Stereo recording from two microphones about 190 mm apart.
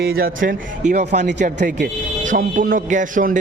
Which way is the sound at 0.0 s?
50° right (ahead or behind).